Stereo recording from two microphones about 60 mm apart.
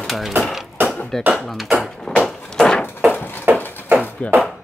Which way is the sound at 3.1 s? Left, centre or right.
Left.